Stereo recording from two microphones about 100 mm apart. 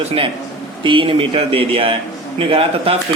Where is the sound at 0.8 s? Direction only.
60° right (ahead or behind).